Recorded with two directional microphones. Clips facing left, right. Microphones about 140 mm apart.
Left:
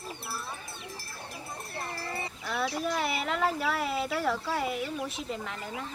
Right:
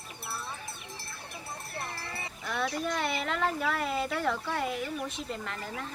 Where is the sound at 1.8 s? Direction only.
30° left (ahead or behind).